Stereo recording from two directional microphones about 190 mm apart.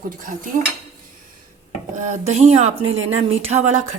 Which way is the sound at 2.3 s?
35° right (ahead or behind).